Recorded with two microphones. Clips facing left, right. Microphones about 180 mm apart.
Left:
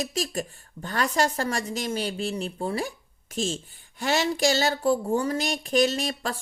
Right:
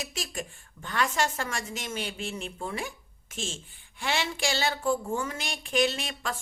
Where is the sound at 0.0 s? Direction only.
35° left (ahead or behind).